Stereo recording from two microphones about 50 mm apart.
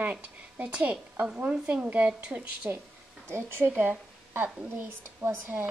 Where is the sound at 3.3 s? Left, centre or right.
Right.